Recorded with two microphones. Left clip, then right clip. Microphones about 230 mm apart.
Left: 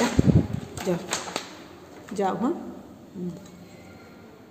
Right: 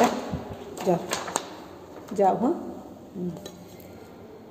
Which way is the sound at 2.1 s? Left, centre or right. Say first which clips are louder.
Right 5 dB; centre.